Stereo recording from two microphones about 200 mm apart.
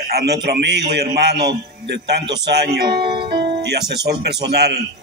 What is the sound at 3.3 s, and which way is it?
Music, 55° right (ahead or behind).